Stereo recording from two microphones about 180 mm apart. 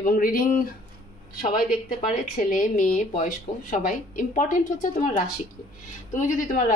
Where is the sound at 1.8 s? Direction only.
50° left (ahead or behind).